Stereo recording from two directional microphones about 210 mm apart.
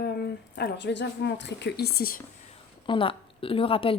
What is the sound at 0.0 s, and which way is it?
Speech, 50° left (ahead or behind).